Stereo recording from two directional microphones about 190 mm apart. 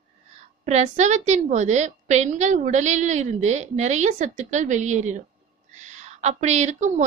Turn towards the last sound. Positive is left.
turn(degrees=-40)  # may be behind; listen again after turning